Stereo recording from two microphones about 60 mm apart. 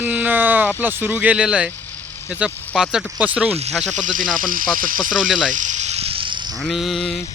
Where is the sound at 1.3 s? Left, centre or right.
Centre.